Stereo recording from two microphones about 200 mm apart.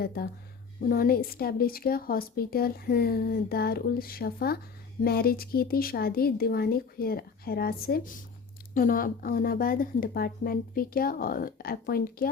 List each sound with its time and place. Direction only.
0.0 s speech: 50° left (ahead or behind)